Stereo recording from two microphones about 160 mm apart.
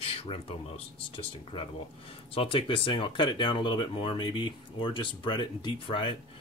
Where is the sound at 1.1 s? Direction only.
30° left (ahead or behind).